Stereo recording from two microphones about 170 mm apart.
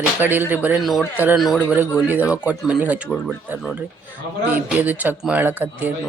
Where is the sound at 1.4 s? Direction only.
5° left (ahead or behind).